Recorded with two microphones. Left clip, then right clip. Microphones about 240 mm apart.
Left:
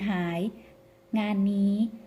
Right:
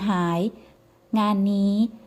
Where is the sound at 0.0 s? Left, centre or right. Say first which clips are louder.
Right 6 dB; right.